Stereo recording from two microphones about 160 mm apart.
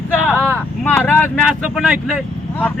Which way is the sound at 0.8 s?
10° left (ahead or behind).